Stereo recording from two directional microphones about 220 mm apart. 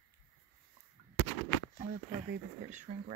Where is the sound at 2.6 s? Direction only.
35° right (ahead or behind).